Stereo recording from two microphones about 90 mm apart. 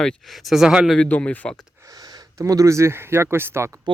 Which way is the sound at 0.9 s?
15° left (ahead or behind).